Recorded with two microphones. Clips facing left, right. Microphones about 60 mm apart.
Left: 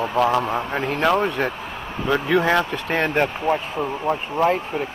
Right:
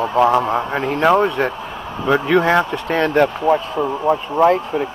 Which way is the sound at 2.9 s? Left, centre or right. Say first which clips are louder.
Right 5 dB; right.